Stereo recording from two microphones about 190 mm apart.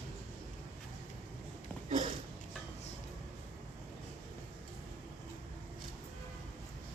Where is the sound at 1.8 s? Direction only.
35° right (ahead or behind).